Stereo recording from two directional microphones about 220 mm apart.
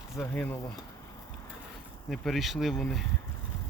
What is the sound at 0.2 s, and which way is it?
Speech, 10° left (ahead or behind).